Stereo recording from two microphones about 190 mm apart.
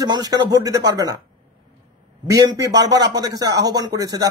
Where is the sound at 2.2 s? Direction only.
20° right (ahead or behind).